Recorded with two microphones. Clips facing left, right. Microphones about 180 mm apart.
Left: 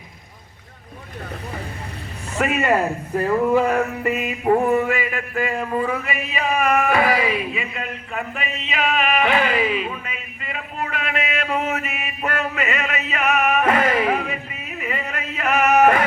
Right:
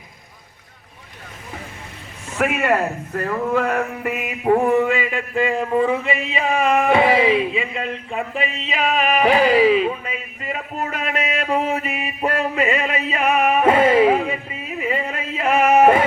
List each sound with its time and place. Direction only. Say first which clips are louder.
2.4 s speech: right 1 dB; centre (ahead or behind)
4.0 s mantra: left 1 dB; 5° right (ahead or behind)
4.9 s a sound: right 2 dB; 20° right (ahead or behind)